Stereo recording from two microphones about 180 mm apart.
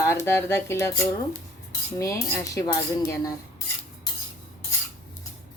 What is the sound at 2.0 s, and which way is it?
Speech, 15° left (ahead or behind).